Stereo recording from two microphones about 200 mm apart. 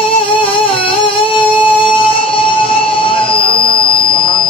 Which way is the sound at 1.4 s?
25° left (ahead or behind).